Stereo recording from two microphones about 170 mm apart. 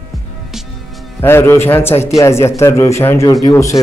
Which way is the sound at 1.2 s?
15° left (ahead or behind).